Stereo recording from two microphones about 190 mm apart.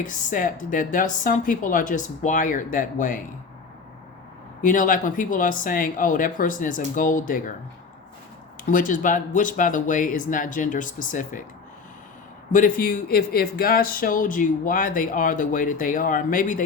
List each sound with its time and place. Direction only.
0.0 s speech: 45° left (ahead or behind)
4.6 s speech: 45° left (ahead or behind)
8.6 s speech: 45° left (ahead or behind)
12.5 s speech: 45° left (ahead or behind)